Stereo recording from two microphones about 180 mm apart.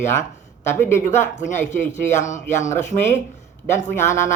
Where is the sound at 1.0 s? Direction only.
40° left (ahead or behind).